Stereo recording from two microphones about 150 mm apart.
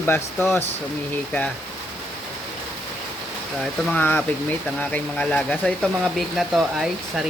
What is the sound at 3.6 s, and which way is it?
Speech, 10° left (ahead or behind).